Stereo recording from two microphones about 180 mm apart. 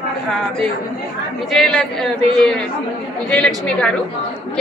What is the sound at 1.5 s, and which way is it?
A woman's voice, 5° left (ahead or behind).